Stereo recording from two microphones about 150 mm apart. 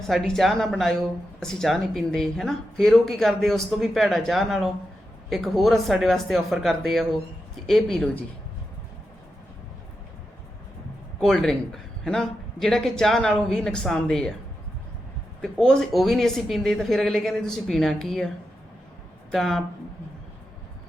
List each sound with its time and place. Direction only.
0.1 s speech: centre (ahead or behind)
11.2 s speech: 5° left (ahead or behind)
15.4 s speech: 5° left (ahead or behind)
19.3 s speech: centre (ahead or behind)